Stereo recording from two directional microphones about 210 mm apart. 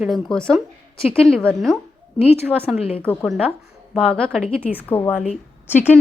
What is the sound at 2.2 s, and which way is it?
Speech, 10° right (ahead or behind).